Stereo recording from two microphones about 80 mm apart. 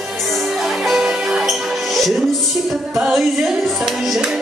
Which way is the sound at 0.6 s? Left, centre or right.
Centre.